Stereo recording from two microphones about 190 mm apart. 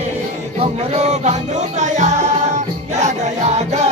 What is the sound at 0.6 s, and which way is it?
Music, 35° right (ahead or behind).